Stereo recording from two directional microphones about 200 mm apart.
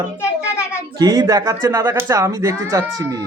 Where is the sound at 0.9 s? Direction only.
20° right (ahead or behind).